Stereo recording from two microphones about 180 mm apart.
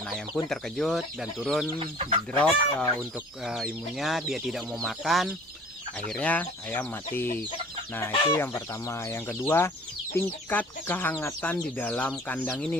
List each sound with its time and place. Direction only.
0.4 s speech: centre (ahead or behind)
1.8 s speech: 30° right (ahead or behind)
2.4 s speech: 5° left (ahead or behind)